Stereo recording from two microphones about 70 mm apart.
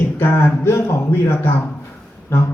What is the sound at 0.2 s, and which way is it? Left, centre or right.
Speech, left.